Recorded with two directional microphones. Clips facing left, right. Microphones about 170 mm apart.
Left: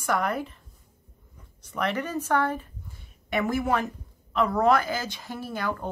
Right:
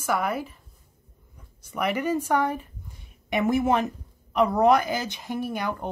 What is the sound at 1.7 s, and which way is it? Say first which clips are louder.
A woman's voice: right 3 dB; 10° right (ahead or behind).